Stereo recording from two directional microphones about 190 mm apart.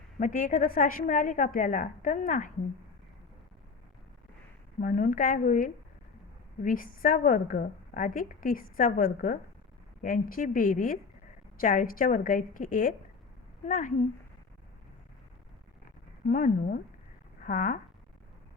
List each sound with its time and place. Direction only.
0.2 s a woman's voice: 45° left (ahead or behind)
4.8 s a woman's voice: 45° left (ahead or behind)
16.2 s a woman's voice: 45° left (ahead or behind)